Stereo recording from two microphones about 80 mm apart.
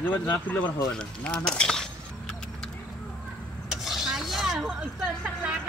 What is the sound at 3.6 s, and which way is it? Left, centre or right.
Vehicle, centre.